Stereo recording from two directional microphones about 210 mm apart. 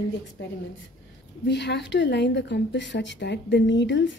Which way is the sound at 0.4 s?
55° left (ahead or behind).